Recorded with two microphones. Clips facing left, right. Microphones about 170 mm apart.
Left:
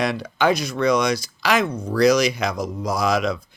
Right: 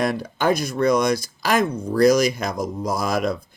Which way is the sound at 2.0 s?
50° right (ahead or behind).